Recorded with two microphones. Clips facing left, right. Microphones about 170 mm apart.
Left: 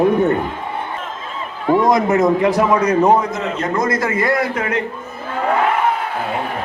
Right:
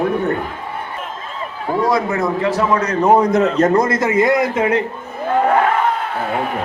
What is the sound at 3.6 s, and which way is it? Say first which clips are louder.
Speech: right 6 dB; 40° right (ahead or behind).